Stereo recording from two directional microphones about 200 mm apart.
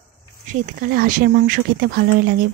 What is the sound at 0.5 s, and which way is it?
Speech, 45° right (ahead or behind).